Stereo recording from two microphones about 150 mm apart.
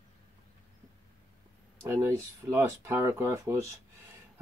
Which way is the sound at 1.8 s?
20° right (ahead or behind).